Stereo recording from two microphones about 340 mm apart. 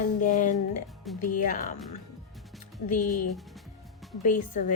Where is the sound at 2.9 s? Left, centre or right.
Left.